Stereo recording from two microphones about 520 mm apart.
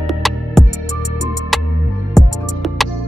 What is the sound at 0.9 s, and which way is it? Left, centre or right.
Music, right.